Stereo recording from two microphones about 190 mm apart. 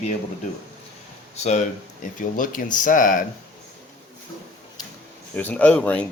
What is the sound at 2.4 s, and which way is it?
Speech, 45° left (ahead or behind).